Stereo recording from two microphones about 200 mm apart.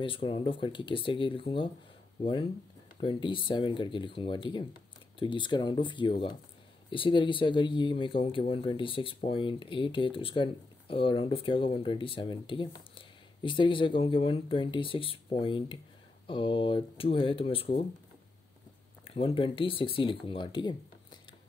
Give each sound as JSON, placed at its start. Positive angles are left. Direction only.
{"t": 0.0, "sound": "speech", "side_deg": 25}
{"t": 3.0, "sound": "speech", "side_deg": 25}
{"t": 19.0, "sound": "speech", "side_deg": 25}